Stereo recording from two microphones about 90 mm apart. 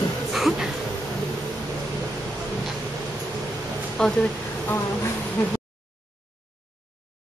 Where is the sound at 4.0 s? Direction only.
5° left (ahead or behind).